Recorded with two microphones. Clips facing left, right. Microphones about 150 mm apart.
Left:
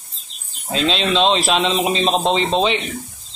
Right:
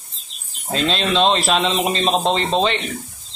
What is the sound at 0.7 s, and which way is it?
Speech, centre (ahead or behind).